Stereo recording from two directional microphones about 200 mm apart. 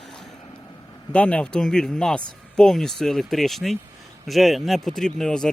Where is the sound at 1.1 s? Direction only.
5° left (ahead or behind).